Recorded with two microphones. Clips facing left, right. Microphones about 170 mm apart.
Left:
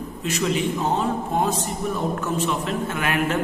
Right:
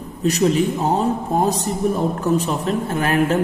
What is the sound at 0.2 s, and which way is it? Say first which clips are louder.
A man's voice: right 7 dB; 40° right (ahead or behind).